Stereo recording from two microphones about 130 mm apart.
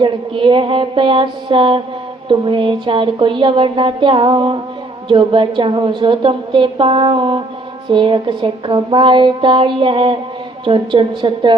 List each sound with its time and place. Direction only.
0.0 s a woman's voice: 40° right (ahead or behind)